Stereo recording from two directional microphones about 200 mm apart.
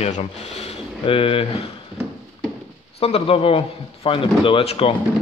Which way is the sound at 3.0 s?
30° left (ahead or behind).